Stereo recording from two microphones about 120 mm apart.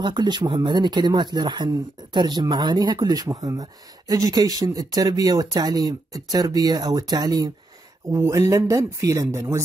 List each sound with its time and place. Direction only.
0.0 s speech: 40° right (ahead or behind)